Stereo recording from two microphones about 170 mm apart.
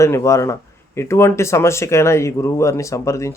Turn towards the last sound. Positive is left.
turn(degrees=15)  # may be behind; listen again after turning